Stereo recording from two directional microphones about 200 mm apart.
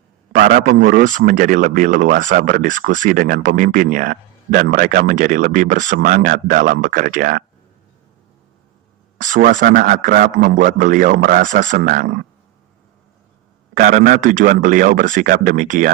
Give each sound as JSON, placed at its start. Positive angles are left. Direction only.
{"t": 0.3, "sound": "speech", "side_deg": -40}
{"t": 9.2, "sound": "speech", "side_deg": -40}
{"t": 13.7, "sound": "speech", "side_deg": -45}